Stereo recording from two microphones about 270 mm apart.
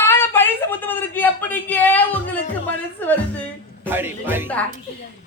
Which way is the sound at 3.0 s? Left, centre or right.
Centre.